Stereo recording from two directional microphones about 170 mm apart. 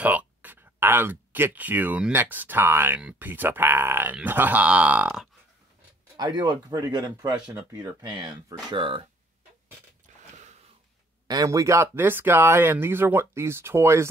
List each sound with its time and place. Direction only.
0.0 s speech: 10° right (ahead or behind)
6.1 s speech: 25° right (ahead or behind)
11.2 s speech: 20° right (ahead or behind)